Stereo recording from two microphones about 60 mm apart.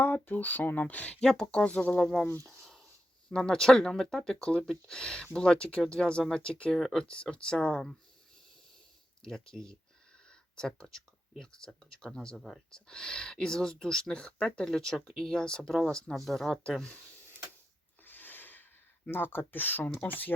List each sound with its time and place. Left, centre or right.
0.0 s speech: left
1.2 s speech: centre
2.0 s speech: centre
3.2 s speech: centre
4.4 s speech: centre
6.7 s speech: centre
7.0 s speech: centre
9.2 s speech: centre
12.4 s speech: centre
12.7 s speech: centre
18.0 s a sound: left
19.1 s speech: left